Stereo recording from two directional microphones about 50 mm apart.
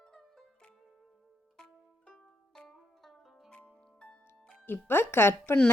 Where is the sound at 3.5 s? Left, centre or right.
Centre.